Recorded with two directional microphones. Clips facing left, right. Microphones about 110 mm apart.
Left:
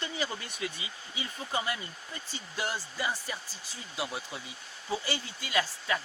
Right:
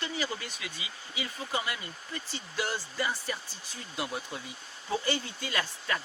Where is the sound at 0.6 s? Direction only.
30° left (ahead or behind).